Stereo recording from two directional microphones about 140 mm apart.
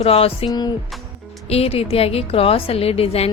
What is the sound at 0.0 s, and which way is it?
Speech, 45° left (ahead or behind).